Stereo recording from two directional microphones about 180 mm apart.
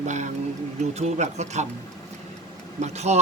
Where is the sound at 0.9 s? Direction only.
40° right (ahead or behind).